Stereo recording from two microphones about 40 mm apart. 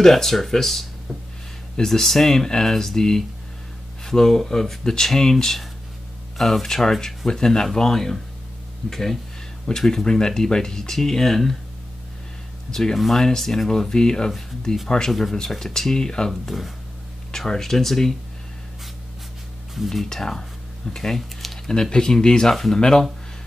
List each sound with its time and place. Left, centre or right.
0.0 s speech: centre
12.7 s speech: centre
15.0 s speech: centre
16.3 s speech: centre
19.7 s speech: centre
20.1 s speech: centre